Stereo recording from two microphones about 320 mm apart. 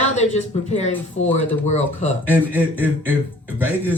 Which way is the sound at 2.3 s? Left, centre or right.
Centre.